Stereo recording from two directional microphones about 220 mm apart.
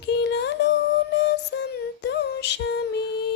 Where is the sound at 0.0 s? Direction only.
50° left (ahead or behind).